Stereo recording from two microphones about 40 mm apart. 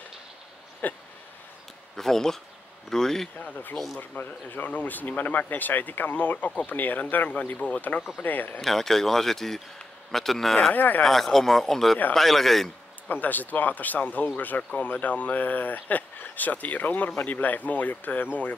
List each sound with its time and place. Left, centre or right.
0.8 s a sound: left
2.0 s speech: centre
3.3 s speech: left
3.7 s speech: centre
4.2 s speech: left
8.2 s speech: left
8.5 s speech: centre
10.7 s speech: left
11.1 s speech: centre
13.1 s speech: left